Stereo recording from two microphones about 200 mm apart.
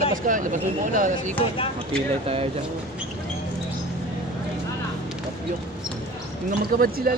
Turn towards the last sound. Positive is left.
turn(degrees=-45)  # may be behind; listen again after turning